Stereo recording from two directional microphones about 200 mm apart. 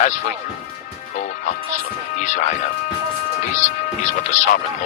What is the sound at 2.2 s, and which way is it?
Speech, 35° left (ahead or behind).